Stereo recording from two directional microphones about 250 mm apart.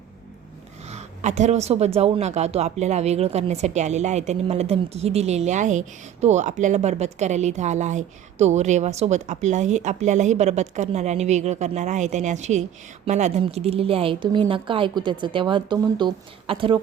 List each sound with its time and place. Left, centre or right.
0.9 s a woman's voice: right